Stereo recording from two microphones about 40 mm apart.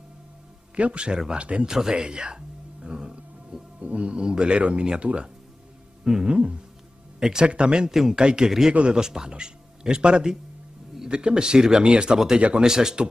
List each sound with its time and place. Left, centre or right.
0.7 s speech: right
1.7 s music: centre
3.8 s speech: right
7.2 s speech: centre
7.9 s speech: centre
8.2 s speech: right
12.6 s speech: centre